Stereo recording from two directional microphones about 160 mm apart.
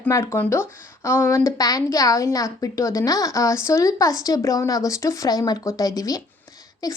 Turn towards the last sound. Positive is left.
turn(degrees=25)  # may be behind; listen again after turning